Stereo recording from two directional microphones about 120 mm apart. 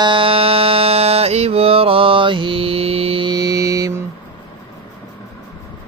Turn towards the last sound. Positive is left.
turn(degrees=-30)  # may be behind; listen again after turning